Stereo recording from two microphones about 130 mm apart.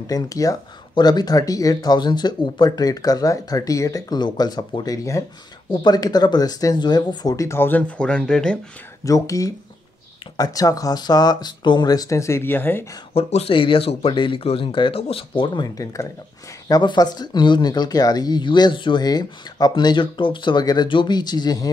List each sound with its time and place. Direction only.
0.0 s speech: 30° left (ahead or behind); by 8.5 s 5° left (ahead or behind)
9.0 s speech: 25° left (ahead or behind)
13.1 s speech: 50° left (ahead or behind); by 21.6 s 30° left (ahead or behind)